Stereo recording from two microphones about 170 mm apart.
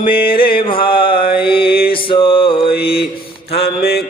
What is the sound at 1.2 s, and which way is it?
Mantra, 65° left (ahead or behind).